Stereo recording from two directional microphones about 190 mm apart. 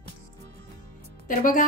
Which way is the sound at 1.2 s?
45° left (ahead or behind).